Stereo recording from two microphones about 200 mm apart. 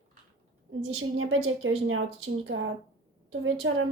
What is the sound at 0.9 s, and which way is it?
A woman's voice, 90° right.